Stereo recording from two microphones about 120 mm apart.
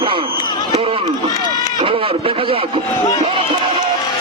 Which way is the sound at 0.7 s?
50° right (ahead or behind).